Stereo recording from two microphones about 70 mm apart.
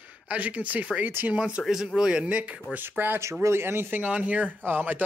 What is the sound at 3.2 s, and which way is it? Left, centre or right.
Speech, right.